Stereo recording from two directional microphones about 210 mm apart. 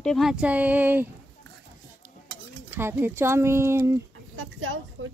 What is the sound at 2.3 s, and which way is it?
Stir, 55° right (ahead or behind).